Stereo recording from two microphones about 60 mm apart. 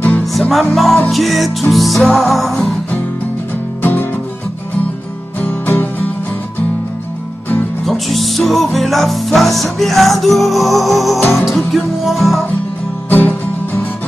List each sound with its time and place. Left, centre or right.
0.3 s music: centre
5.4 s music: left
7.8 s music: centre
13.1 s music: left